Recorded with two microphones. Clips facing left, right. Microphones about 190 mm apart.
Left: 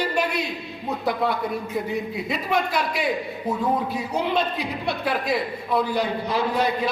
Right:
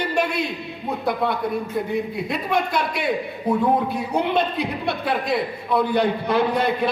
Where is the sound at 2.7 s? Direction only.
55° right (ahead or behind).